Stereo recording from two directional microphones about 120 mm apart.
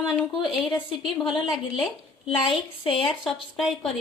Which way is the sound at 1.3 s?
5° right (ahead or behind).